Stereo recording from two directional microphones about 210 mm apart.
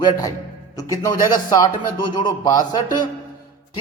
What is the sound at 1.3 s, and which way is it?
A man's voice, 20° left (ahead or behind).